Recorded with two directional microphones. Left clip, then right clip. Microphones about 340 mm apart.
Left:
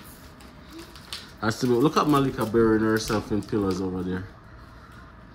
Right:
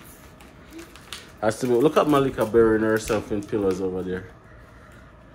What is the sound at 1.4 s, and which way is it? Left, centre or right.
Speech, centre.